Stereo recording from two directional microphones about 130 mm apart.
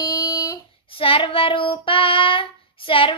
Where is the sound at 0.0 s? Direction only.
25° left (ahead or behind).